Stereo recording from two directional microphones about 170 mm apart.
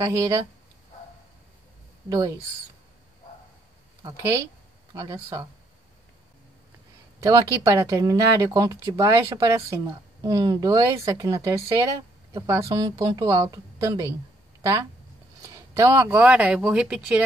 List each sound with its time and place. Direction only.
0.0 s speech: 20° right (ahead or behind)
2.0 s speech: 20° right (ahead or behind)
4.0 s speech: 20° right (ahead or behind)
7.2 s speech: 20° right (ahead or behind)